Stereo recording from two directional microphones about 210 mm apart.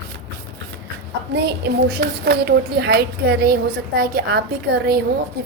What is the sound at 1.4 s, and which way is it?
A woman's voice, 50° right (ahead or behind).